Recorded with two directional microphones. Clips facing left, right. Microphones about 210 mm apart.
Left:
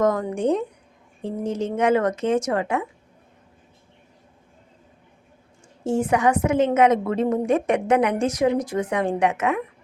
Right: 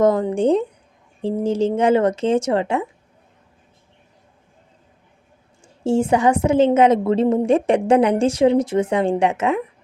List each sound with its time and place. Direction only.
0.0 s a woman's voice: 30° right (ahead or behind)
5.8 s a woman's voice: 30° right (ahead or behind)